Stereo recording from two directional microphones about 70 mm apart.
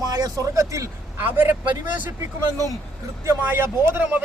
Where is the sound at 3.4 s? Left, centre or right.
Right.